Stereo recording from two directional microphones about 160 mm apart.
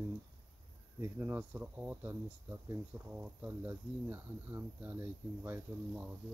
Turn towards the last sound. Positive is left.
turn(degrees=-10)  # may be behind; listen again after turning